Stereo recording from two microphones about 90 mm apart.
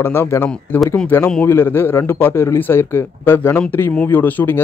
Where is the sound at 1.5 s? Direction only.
25° left (ahead or behind).